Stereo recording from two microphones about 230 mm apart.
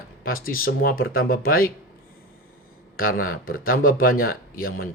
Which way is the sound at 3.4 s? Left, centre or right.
Left.